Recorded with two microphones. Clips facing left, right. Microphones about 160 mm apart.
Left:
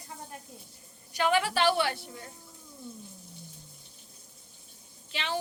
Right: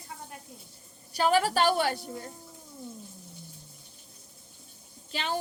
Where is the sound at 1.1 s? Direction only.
35° right (ahead or behind).